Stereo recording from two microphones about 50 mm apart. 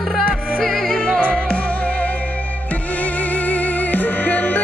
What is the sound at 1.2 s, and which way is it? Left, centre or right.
Music, left.